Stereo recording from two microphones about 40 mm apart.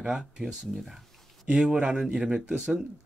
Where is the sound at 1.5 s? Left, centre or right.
Right.